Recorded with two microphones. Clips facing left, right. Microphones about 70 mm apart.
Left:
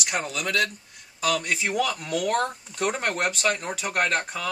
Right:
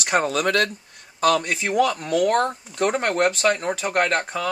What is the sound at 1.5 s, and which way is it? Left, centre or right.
Speech, right.